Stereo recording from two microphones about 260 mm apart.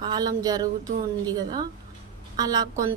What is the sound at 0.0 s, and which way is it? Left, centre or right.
Speech, centre.